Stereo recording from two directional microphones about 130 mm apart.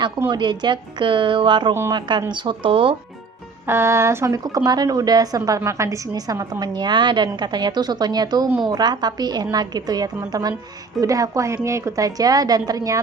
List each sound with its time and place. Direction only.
0.3 s a woman's voice: 35° right (ahead or behind)
3.7 s a woman's voice: 20° right (ahead or behind)